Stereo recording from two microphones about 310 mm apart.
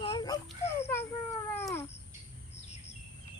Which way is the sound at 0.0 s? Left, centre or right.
Centre.